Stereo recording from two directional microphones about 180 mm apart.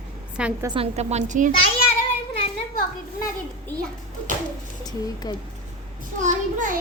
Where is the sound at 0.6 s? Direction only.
30° right (ahead or behind).